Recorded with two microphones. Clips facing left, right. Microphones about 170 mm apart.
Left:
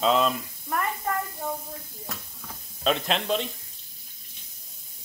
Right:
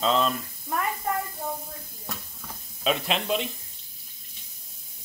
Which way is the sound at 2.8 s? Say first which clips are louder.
Left 1 dB; 5° right (ahead or behind).